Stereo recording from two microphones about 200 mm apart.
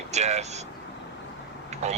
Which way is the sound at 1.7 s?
35° right (ahead or behind).